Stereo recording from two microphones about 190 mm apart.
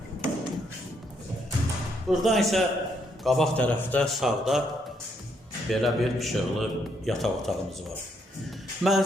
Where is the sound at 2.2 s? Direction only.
Centre (ahead or behind).